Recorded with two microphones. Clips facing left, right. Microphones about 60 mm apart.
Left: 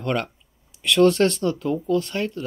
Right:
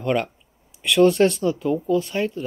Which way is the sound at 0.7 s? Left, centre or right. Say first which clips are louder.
Right 1 dB; centre.